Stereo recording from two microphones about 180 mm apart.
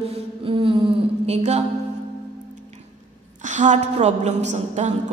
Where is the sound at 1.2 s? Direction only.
35° right (ahead or behind).